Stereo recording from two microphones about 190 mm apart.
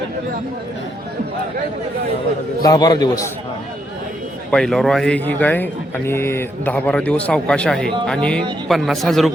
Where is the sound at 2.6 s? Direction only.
20° left (ahead or behind).